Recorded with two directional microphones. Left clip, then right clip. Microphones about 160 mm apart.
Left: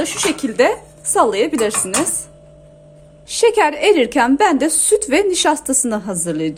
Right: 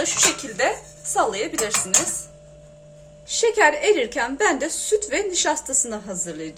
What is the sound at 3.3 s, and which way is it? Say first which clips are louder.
A woman's voice: left 4 dB; 70° left (ahead or behind).